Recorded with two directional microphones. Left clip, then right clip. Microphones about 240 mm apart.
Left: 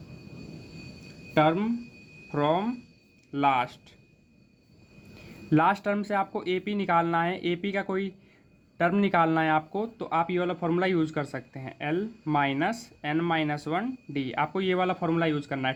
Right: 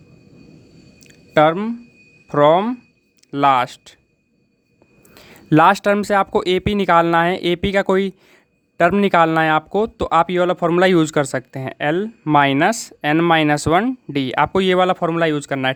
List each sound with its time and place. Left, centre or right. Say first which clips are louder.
1.3 s speech: right 9 dB; right
5.1 s speech: right 10 dB; right